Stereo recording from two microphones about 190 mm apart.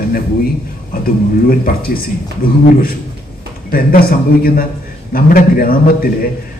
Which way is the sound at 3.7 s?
50° left (ahead or behind).